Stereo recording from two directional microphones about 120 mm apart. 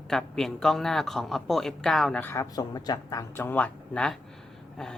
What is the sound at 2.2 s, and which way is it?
Speech, 20° left (ahead or behind).